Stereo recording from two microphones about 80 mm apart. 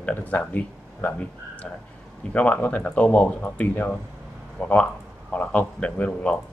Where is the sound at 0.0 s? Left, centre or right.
Centre.